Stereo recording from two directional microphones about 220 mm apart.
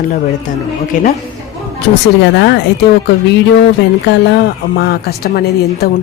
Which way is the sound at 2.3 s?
50° left (ahead or behind).